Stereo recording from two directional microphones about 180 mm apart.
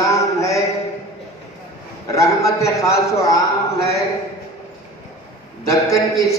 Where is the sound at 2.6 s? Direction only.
15° left (ahead or behind).